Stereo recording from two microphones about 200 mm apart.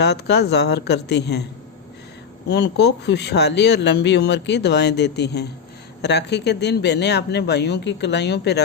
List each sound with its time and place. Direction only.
0.0 s speech: 55° left (ahead or behind)
2.5 s speech: 55° left (ahead or behind)